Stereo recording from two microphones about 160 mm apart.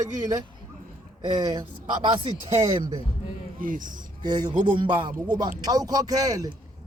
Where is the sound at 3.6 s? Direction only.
55° right (ahead or behind).